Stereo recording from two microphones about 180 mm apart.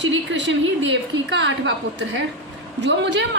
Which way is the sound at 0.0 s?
85° right.